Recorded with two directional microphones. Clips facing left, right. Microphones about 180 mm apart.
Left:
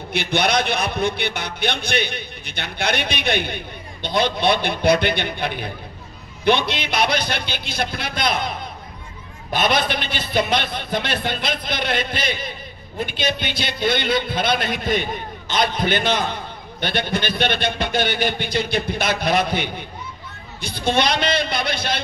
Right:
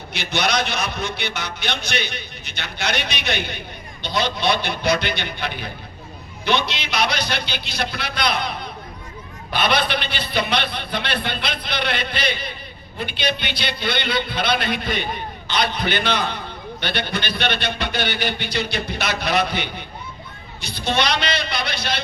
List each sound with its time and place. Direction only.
0.1 s a man's voice: 55° left (ahead or behind)